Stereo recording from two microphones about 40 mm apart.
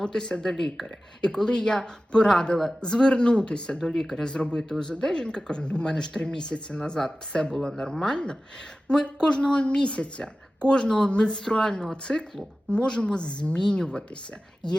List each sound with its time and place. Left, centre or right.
0.0 s speech: centre
0.5 s speech: centre
1.2 s speech: centre